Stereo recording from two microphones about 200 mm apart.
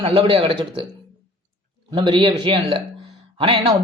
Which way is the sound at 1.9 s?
25° right (ahead or behind).